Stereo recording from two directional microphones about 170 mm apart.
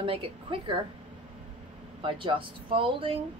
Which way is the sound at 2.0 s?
30° right (ahead or behind).